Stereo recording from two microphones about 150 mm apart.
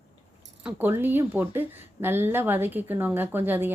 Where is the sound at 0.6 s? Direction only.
10° right (ahead or behind).